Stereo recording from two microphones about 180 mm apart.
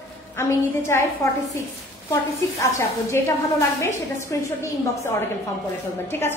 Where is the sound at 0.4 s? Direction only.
15° left (ahead or behind).